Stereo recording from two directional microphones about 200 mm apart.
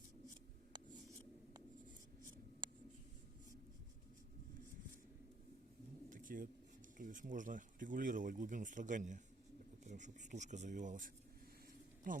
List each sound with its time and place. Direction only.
6.1 s pigeon: 45° right (ahead or behind)
7.0 s speech: 40° right (ahead or behind)